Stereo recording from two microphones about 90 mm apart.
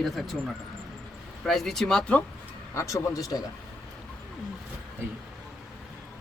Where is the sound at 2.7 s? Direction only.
35° left (ahead or behind).